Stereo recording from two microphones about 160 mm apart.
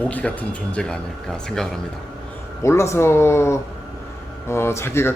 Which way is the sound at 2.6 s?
15° left (ahead or behind).